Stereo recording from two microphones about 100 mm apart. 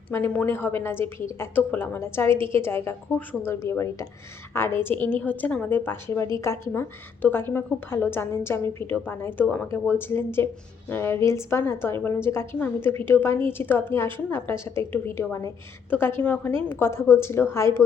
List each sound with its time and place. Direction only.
0.1 s a woman's voice: 20° left (ahead or behind)